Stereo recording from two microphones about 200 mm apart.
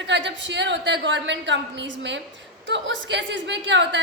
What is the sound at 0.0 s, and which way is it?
A woman's voice, 60° right (ahead or behind).